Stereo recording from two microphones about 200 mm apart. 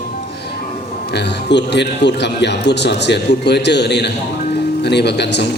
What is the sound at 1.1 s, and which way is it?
A man's voice, 60° left (ahead or behind).